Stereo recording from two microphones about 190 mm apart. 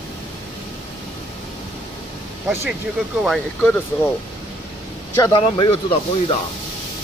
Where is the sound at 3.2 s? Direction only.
Centre (ahead or behind).